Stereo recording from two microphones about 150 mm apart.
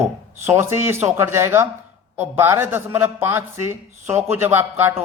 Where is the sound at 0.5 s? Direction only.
15° right (ahead or behind).